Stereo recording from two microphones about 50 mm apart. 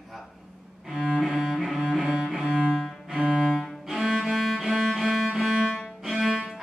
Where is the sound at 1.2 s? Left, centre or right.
Centre.